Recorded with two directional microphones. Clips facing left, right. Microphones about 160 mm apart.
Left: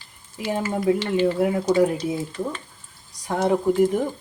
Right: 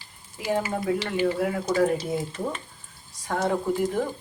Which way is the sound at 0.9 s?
25° left (ahead or behind).